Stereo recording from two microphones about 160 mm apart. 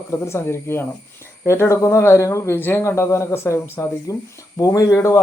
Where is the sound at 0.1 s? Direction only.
15° left (ahead or behind).